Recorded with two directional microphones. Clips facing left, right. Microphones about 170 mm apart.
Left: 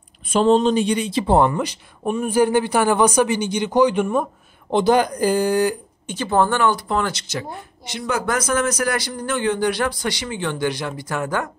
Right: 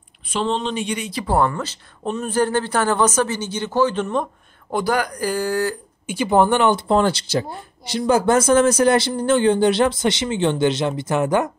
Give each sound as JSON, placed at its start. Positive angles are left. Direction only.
{"t": 0.3, "sound": "speech", "side_deg": 45}
{"t": 4.6, "sound": "speech", "side_deg": 25}
{"t": 6.0, "sound": "speech", "side_deg": -15}